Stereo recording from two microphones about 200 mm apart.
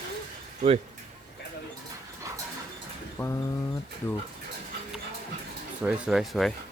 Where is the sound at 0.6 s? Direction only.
30° right (ahead or behind).